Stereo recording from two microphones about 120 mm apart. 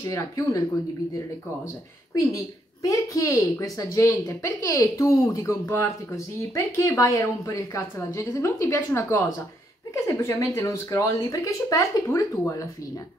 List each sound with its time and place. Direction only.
2.8 s a woman's voice: 25° left (ahead or behind)